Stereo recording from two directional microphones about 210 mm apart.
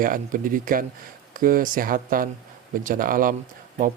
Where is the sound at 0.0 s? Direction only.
40° right (ahead or behind).